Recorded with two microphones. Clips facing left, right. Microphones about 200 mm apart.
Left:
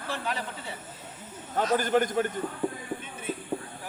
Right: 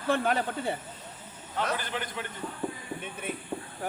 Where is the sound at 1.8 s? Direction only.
45° left (ahead or behind).